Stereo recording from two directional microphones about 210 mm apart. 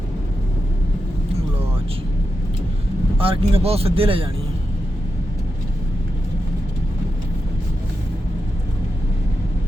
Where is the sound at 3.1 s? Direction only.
25° right (ahead or behind).